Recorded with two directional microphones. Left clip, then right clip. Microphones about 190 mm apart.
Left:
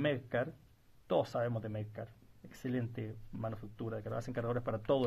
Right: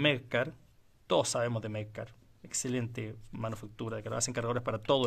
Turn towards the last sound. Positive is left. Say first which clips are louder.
# right 4 dB
turn(degrees=-30)  # may be behind; listen again after turning